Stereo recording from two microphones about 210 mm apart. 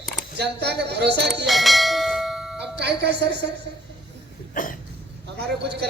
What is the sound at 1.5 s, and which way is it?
Bell, centre (ahead or behind).